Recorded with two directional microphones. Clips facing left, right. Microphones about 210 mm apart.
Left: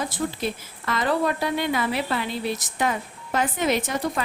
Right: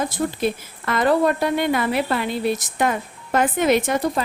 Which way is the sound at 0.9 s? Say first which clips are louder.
Right 5 dB; 50° right (ahead or behind).